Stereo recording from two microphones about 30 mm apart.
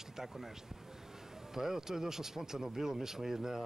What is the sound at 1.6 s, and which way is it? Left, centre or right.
Speech, centre.